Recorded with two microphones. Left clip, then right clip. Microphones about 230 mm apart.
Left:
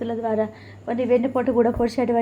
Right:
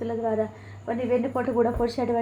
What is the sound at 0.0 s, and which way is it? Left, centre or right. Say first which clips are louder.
A woman's voice: left 3 dB; left.